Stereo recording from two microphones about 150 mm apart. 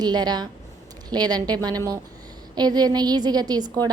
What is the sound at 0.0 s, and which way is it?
A woman's voice, 30° right (ahead or behind).